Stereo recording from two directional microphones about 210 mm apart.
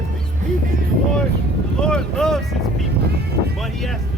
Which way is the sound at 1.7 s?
5° left (ahead or behind).